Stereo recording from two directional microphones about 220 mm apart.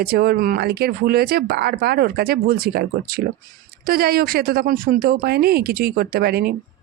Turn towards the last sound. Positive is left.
turn(degrees=-45)  # may be behind; listen again after turning